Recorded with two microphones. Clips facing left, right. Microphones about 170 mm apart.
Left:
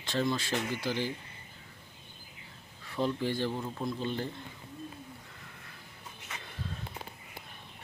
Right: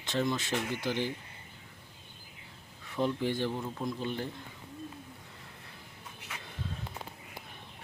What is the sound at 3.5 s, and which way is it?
Speech, 5° left (ahead or behind).